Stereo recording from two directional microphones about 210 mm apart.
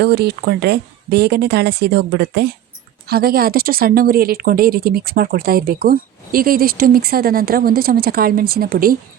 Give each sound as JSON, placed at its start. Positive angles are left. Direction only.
{"t": 0.0, "sound": "speech", "side_deg": -50}